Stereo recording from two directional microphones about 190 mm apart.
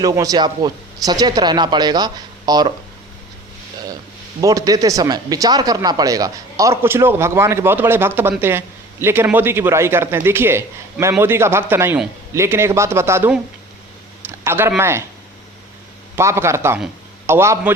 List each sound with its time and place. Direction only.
0.0 s speech: 20° right (ahead or behind)
4.4 s speech: 20° right (ahead or behind)
14.3 s a sound: 10° right (ahead or behind)
14.8 s speech: 15° right (ahead or behind)
16.1 s speech: 15° right (ahead or behind)